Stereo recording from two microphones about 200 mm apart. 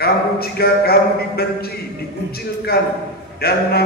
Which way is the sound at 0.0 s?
50° left (ahead or behind).